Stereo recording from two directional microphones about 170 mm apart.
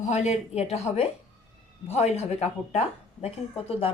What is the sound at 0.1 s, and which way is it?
A woman's voice, 40° left (ahead or behind).